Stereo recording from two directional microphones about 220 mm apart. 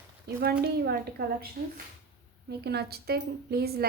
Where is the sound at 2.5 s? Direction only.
45° right (ahead or behind).